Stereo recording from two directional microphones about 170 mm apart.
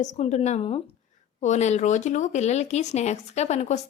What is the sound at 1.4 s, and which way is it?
Speech, 45° left (ahead or behind).